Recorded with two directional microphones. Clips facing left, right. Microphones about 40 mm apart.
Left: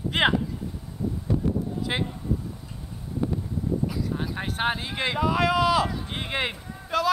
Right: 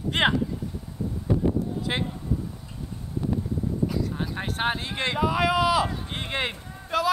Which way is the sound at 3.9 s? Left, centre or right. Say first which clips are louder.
Even; centre.